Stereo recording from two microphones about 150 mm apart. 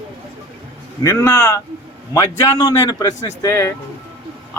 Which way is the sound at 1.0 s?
20° left (ahead or behind).